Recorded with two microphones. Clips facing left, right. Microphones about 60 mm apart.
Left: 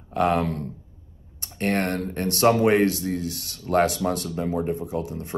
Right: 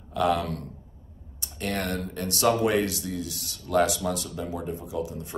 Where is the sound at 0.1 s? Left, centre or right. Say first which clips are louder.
Left 3 dB; left.